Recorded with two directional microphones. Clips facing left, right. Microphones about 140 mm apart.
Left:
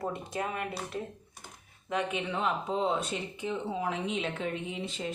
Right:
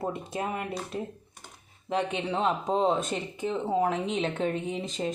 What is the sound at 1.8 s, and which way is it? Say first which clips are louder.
Speech: right 3 dB; 30° right (ahead or behind).